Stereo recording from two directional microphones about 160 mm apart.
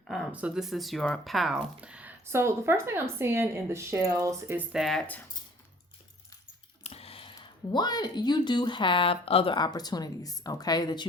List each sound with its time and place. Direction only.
0.1 s speech: 5° right (ahead or behind)
4.7 s speech: centre (ahead or behind)
6.8 s speech: 40° left (ahead or behind)